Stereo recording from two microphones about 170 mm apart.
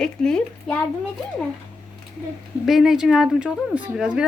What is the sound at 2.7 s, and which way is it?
Speech, centre (ahead or behind).